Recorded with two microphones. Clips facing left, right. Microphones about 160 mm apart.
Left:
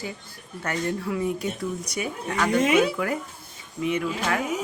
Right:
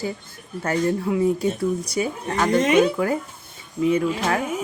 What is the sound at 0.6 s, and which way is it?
Speech, 30° right (ahead or behind).